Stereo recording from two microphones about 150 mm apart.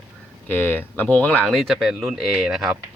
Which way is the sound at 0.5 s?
15° left (ahead or behind).